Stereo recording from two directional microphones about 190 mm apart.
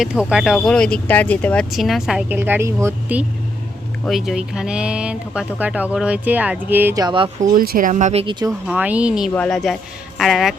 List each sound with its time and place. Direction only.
0.0 s speech: 5° right (ahead or behind); by 7.3 s 25° right (ahead or behind)
7.5 s speech: 50° right (ahead or behind); by 8.4 s 25° right (ahead or behind)
8.4 s speech: 5° right (ahead or behind)